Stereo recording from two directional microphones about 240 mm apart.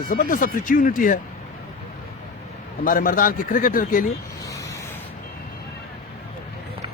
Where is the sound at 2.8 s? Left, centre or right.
Left.